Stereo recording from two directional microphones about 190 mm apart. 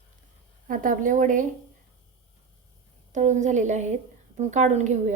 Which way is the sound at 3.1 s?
40° right (ahead or behind).